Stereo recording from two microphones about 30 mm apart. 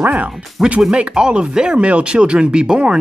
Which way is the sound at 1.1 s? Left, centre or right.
Right.